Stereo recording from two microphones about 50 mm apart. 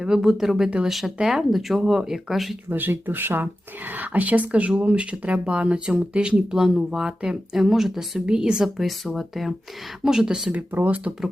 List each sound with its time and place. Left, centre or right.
0.0 s speech: centre
2.6 s speech: right; by 8.7 s centre
8.8 s speech: centre
10.0 s speech: centre
10.7 s speech: right